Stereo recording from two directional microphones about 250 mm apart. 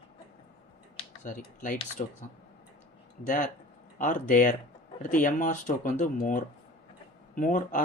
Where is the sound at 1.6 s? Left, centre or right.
Left.